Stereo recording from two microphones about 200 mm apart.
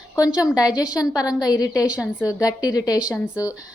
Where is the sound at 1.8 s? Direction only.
5° right (ahead or behind).